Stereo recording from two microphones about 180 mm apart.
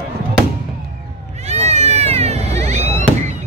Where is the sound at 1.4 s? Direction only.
35° right (ahead or behind).